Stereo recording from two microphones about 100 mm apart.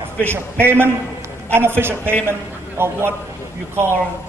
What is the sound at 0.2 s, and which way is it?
A man's voice, 25° right (ahead or behind).